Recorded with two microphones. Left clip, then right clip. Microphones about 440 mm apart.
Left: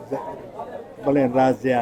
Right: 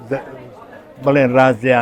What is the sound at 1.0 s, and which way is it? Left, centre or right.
Speech, right.